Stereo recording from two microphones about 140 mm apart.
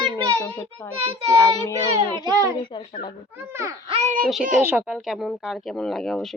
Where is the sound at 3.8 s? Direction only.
45° right (ahead or behind).